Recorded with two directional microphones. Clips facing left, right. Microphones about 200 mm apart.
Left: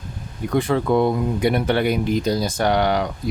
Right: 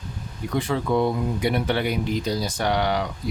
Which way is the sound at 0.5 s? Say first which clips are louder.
Left 4 dB; 55° left (ahead or behind).